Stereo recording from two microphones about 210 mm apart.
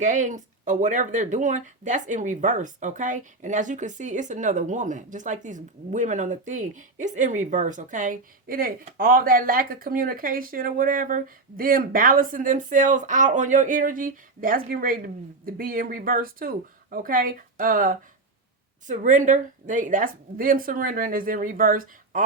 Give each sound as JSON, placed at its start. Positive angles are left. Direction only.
{"t": 0.0, "sound": "speech", "side_deg": -35}